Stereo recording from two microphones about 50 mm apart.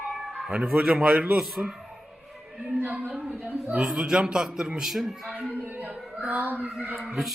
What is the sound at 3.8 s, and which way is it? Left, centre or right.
Speech, centre.